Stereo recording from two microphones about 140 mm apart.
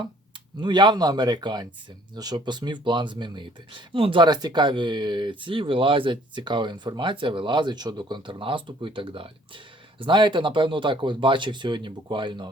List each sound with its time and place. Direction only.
0.6 s speech: 30° right (ahead or behind)